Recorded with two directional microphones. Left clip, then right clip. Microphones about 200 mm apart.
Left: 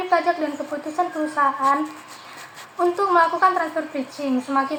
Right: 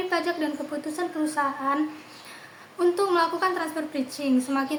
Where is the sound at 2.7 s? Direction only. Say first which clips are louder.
Left 5 dB; 45° right (ahead or behind).